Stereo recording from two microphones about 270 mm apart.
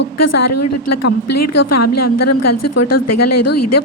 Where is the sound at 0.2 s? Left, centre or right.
Left.